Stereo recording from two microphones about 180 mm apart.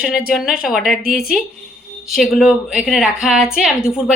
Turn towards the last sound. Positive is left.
turn(degrees=-5)  # may be behind; listen again after turning